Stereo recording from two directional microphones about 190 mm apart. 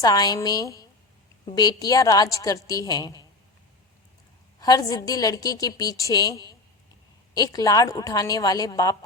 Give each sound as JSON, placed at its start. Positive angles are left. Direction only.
{"t": 0.0, "sound": "a woman's voice", "side_deg": 20}
{"t": 4.6, "sound": "a woman's voice", "side_deg": 20}